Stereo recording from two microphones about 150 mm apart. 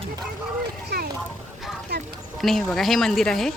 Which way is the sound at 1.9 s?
90° right.